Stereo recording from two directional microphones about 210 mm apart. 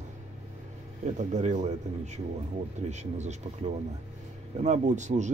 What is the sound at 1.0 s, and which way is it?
Speech, 35° right (ahead or behind).